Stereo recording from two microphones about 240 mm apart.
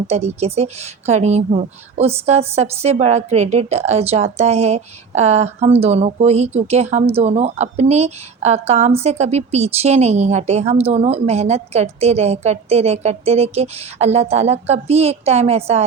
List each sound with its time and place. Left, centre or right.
0.1 s speech: right